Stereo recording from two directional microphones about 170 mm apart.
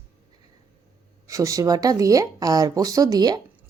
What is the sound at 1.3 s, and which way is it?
Speech, 20° right (ahead or behind).